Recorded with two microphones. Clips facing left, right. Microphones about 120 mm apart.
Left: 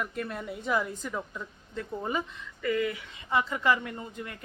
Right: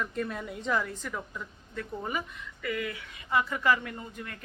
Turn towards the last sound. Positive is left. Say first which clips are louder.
# left 2 dB
turn(degrees=20)  # may be behind; listen again after turning